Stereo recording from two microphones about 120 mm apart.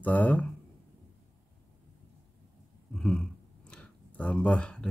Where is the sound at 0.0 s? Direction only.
15° left (ahead or behind).